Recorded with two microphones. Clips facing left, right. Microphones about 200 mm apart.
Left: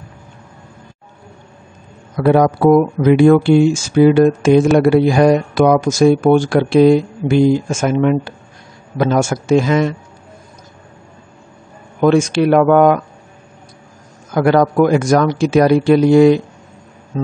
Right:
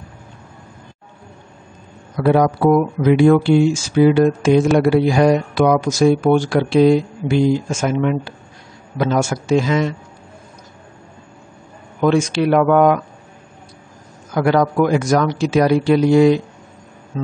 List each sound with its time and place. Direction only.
2.1 s speech: 50° left (ahead or behind)
12.0 s speech: 50° left (ahead or behind)
14.3 s speech: 50° left (ahead or behind)
17.1 s music: 45° left (ahead or behind)